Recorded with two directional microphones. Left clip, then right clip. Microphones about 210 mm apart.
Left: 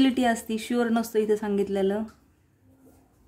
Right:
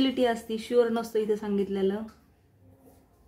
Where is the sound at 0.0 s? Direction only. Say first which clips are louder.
Left 2 dB; 50° left (ahead or behind).